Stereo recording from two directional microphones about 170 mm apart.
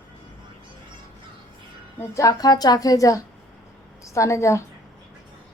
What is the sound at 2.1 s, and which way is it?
A woman's voice, 20° left (ahead or behind).